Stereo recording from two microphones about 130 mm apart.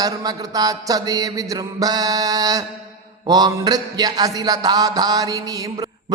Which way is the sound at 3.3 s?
30° right (ahead or behind).